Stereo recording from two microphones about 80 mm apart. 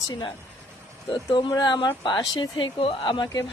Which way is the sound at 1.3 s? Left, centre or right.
Left.